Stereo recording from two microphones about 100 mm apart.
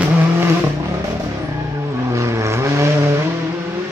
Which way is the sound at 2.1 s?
30° right (ahead or behind).